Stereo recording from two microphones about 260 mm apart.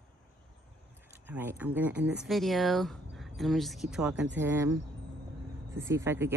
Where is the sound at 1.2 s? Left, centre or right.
Centre.